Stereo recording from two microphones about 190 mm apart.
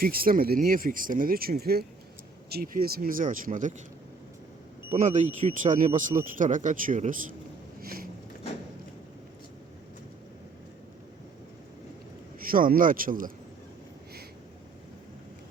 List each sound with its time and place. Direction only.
0.0 s speech: 50° right (ahead or behind)
4.9 s speech: 40° right (ahead or behind)
7.8 s a sound: 50° right (ahead or behind)
12.4 s speech: 45° right (ahead or behind)